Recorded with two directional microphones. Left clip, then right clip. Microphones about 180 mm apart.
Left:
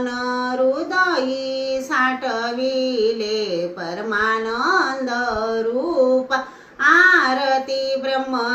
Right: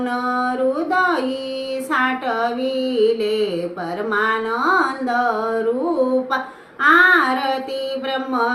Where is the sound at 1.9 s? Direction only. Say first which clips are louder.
Right 2 dB; 15° right (ahead or behind).